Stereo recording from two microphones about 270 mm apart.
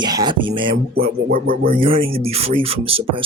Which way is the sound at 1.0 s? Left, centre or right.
Right.